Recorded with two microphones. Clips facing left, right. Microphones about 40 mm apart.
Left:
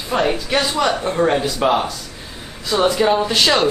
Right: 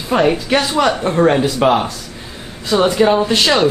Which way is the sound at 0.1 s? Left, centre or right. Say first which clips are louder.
Right 4 dB; centre.